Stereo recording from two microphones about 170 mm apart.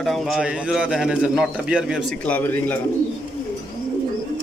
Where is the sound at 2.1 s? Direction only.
10° left (ahead or behind).